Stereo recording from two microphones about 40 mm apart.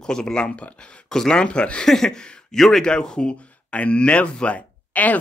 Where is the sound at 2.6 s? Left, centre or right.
Centre.